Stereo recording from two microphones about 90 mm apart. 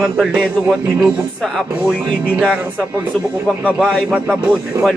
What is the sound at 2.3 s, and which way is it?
Speech, 10° right (ahead or behind).